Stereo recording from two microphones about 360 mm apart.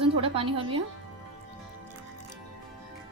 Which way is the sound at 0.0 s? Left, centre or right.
Centre.